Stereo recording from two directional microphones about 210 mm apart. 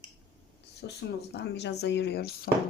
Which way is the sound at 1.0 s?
55° left (ahead or behind).